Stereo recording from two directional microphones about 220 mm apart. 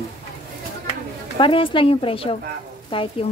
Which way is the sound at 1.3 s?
25° left (ahead or behind).